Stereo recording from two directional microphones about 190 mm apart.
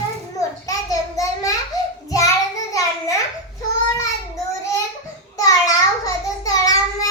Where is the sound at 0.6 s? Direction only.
20° left (ahead or behind).